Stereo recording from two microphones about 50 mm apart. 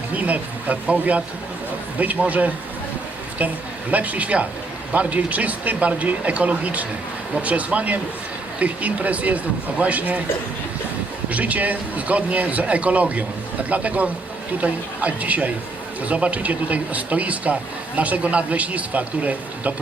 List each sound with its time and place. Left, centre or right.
0.1 s a man's voice: right
3.9 s a man's voice: right
11.3 s a man's voice: right